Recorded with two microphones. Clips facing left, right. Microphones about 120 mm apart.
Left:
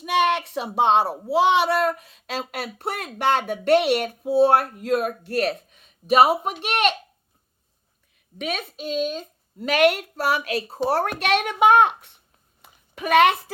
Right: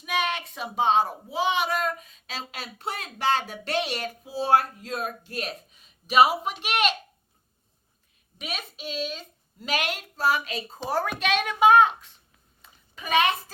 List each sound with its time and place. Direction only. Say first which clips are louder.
0.0 s a sound: left 7 dB; 65° left (ahead or behind)
1.1 s child singing: left 7 dB; 70° left (ahead or behind)
8.9 s child singing: left 7 dB; 45° left (ahead or behind); by 10.8 s 70° left (ahead or behind)
10.8 s a woman's voice: left 5 dB; 70° left (ahead or behind)
11.2 s child singing: even; 65° left (ahead or behind)
12.6 s a sound: left 9 dB; 65° left (ahead or behind)